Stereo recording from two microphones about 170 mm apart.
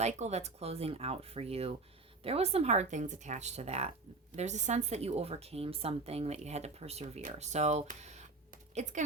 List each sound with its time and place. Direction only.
0.0 s a woman's voice: 40° right (ahead or behind)